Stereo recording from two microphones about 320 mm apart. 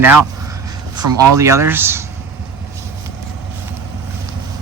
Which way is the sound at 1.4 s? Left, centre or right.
Centre.